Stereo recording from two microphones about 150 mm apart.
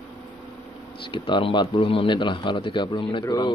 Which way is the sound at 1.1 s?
35° left (ahead or behind).